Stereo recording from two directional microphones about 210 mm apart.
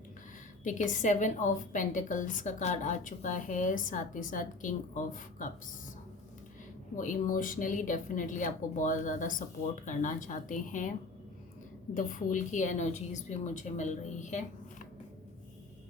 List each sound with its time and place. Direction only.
0.6 s a woman's voice: 35° left (ahead or behind)
6.9 s a woman's voice: 40° left (ahead or behind)
11.9 s a woman's voice: 40° left (ahead or behind)